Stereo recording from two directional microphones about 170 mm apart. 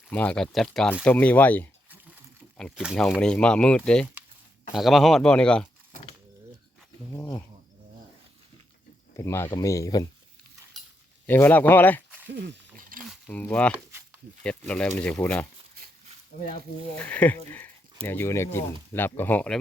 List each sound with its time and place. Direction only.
0.1 s speech: 10° left (ahead or behind)
7.1 s speech: 20° left (ahead or behind)
9.1 s speech: 15° left (ahead or behind)
11.3 s speech: 10° left (ahead or behind)
12.3 s speech: 85° right
12.7 s a sound: 55° right (ahead or behind)
13.2 s speech: 10° left (ahead or behind)
17.0 s speech: 10° left (ahead or behind)